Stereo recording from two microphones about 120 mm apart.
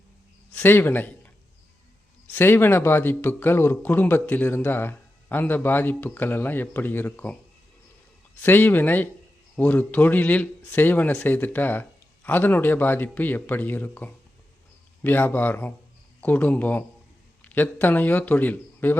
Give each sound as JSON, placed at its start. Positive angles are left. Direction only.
{"t": 0.5, "sound": "speech", "side_deg": 15}
{"t": 2.3, "sound": "speech", "side_deg": 20}
{"t": 8.4, "sound": "speech", "side_deg": 15}